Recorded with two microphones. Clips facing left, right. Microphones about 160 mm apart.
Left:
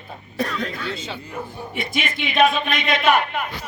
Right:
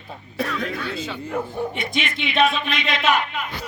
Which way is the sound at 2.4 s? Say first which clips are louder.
Left 2 dB; 50° left (ahead or behind).